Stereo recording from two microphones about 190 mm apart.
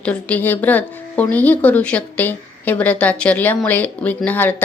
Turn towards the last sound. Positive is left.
turn(degrees=10)  # may be behind; listen again after turning